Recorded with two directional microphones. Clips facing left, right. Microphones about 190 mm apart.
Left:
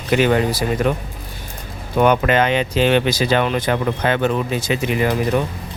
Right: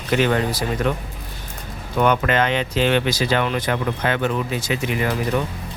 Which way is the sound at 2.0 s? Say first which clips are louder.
Left 3 dB; 15° left (ahead or behind).